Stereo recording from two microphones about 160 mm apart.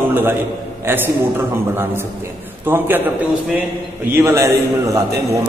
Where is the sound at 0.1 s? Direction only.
15° right (ahead or behind).